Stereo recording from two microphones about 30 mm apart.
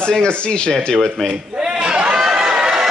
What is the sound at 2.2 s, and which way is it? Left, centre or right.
Chatter, centre.